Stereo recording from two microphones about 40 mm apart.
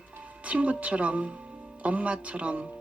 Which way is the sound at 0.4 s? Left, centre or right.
Right.